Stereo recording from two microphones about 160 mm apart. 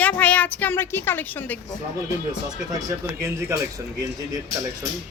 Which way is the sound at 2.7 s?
20° right (ahead or behind).